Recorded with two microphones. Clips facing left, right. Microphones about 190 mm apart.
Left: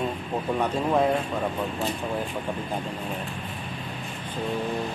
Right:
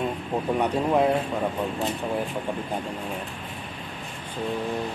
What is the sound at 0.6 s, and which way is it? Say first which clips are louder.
Speech: right 1 dB; 10° right (ahead or behind).